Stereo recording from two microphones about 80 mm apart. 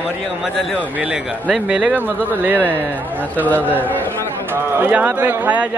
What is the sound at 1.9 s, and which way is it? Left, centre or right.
Speech, right.